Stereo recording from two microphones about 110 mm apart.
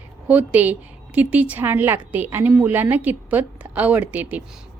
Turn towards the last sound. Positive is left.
turn(degrees=-15)  # may be behind; listen again after turning